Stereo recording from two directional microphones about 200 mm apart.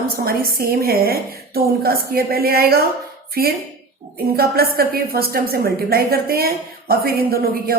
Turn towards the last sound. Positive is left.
turn(degrees=-50)  # may be behind; listen again after turning